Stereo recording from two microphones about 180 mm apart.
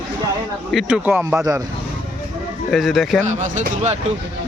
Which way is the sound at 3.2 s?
40° right (ahead or behind).